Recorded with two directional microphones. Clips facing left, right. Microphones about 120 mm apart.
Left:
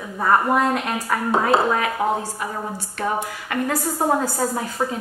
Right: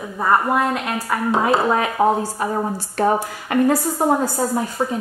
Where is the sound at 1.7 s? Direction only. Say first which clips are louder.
Right 4 dB; 35° right (ahead or behind).